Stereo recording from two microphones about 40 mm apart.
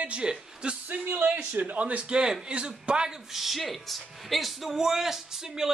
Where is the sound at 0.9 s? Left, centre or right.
Right.